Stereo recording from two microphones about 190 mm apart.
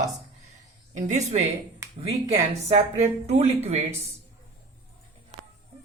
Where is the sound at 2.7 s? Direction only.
35° right (ahead or behind).